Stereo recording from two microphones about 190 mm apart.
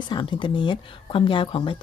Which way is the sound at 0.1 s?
25° left (ahead or behind).